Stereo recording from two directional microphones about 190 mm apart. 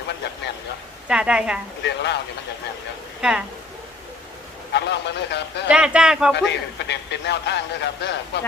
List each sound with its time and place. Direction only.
1.0 s speech: 5° right (ahead or behind)
1.8 s speech: 65° left (ahead or behind)
3.2 s speech: 5° right (ahead or behind)
4.7 s speech: 65° left (ahead or behind)
5.6 s speech: 5° right (ahead or behind)
6.5 s speech: 65° left (ahead or behind)